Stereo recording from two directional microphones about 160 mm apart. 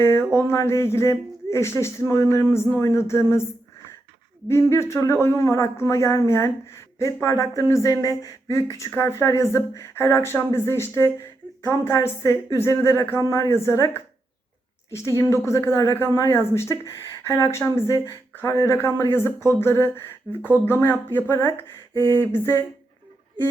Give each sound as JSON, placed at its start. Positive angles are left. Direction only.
{"t": 0.0, "sound": "speech", "side_deg": 15}
{"t": 4.4, "sound": "speech", "side_deg": 15}
{"t": 15.2, "sound": "speech", "side_deg": 20}